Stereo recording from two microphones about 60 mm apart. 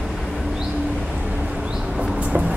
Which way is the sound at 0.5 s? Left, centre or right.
Centre.